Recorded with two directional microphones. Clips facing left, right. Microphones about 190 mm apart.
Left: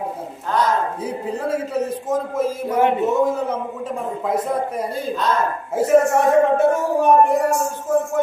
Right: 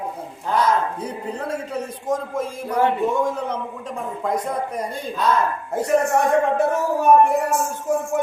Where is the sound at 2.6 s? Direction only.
25° left (ahead or behind).